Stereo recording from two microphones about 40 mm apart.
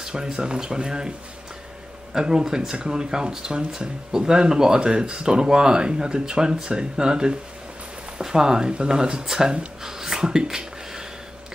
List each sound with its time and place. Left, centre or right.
0.0 s speech: right
2.1 s speech: centre
9.8 s a sound: centre